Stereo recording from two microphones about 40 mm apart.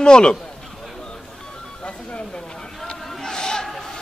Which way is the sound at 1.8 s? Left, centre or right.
Left.